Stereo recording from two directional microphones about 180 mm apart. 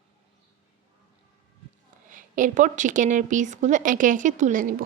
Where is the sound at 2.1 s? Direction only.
45° right (ahead or behind).